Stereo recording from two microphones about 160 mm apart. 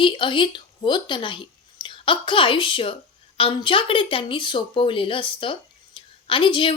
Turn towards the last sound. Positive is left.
turn(degrees=30)  # may be behind; listen again after turning